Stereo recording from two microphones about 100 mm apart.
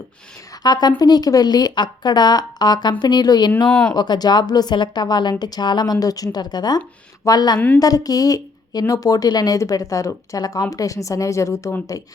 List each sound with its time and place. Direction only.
0.6 s a woman's voice: 45° left (ahead or behind)
3.7 s speech: 10° left (ahead or behind)
3.9 s a woman's voice: 45° left (ahead or behind)